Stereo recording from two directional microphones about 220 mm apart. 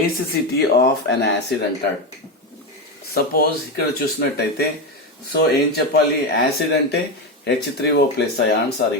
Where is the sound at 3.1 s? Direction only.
45° left (ahead or behind).